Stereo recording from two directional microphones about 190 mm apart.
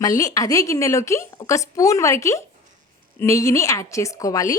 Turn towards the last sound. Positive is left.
turn(degrees=20)  # may be behind; listen again after turning